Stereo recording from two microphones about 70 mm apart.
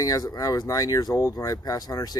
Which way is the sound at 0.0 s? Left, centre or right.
Left.